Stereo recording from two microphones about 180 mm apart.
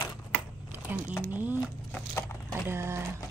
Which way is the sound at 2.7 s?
15° right (ahead or behind).